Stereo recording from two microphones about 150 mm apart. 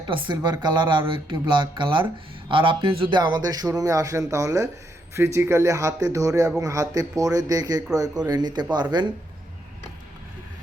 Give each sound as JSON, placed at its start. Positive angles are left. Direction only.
{"t": 0.1, "sound": "speech", "side_deg": -35}